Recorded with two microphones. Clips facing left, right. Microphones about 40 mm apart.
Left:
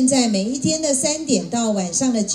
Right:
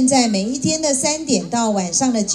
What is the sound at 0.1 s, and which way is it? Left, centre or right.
A woman's voice, right.